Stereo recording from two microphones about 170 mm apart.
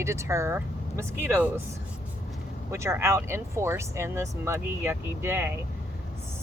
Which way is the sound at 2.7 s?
15° right (ahead or behind).